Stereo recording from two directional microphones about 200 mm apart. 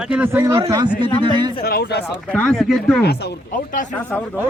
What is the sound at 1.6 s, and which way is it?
Speech, 55° left (ahead or behind).